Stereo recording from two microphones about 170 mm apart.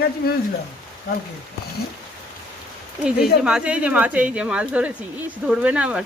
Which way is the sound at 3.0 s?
5° right (ahead or behind).